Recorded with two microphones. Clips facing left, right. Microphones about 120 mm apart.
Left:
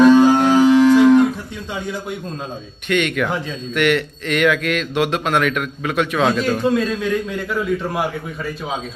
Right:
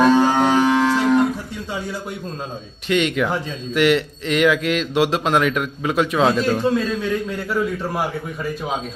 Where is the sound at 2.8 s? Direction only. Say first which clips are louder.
Even; 25° right (ahead or behind).